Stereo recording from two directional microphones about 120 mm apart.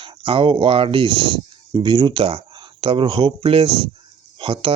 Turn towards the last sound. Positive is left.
turn(degrees=-50)  # may be behind; listen again after turning